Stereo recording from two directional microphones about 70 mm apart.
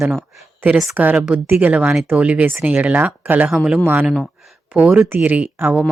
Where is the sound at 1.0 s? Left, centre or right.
Right.